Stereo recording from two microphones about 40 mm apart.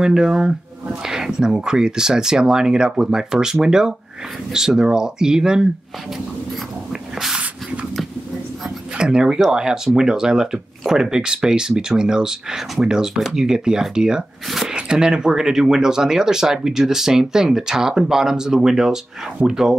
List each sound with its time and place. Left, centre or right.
0.0 s speech: centre
6.9 s snort: centre
8.9 s speech: centre